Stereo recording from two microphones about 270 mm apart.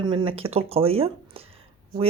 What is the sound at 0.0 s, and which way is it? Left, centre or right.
Speech, centre.